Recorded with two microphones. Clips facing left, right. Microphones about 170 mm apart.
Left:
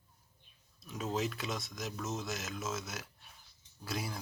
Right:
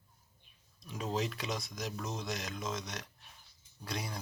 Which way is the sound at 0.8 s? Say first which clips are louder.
Even; centre (ahead or behind).